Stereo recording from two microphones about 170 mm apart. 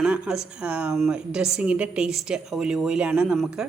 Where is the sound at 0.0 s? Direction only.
5° right (ahead or behind).